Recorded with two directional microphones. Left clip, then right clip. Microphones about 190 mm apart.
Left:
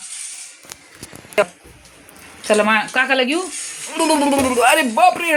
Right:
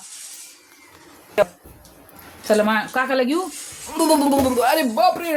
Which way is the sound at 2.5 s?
15° right (ahead or behind).